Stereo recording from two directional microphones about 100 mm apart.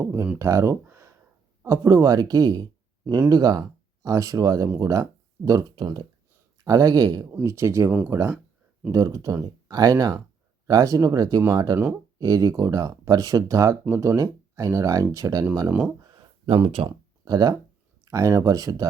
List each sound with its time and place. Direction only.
0.0 s speech: 25° right (ahead or behind); by 6.1 s 45° right (ahead or behind)
6.7 s speech: 35° right (ahead or behind)
15.6 s speech: 15° right (ahead or behind)
16.6 s speech: 60° right (ahead or behind)
17.2 s speech: 40° right (ahead or behind)